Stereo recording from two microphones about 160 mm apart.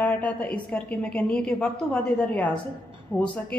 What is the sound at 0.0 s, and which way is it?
A woman's voice, 10° left (ahead or behind).